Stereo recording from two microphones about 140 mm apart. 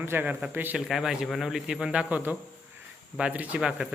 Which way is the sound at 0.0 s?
15° right (ahead or behind).